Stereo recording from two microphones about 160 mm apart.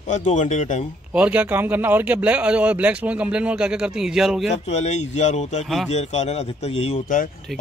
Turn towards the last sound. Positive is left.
turn(degrees=40)  # may be behind; listen again after turning